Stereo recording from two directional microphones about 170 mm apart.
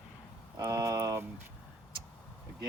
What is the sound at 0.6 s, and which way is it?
Speech, 20° right (ahead or behind).